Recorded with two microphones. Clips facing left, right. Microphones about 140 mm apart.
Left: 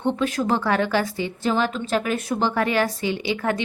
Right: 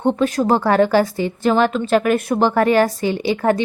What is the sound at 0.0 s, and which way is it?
A woman's voice, 45° right (ahead or behind).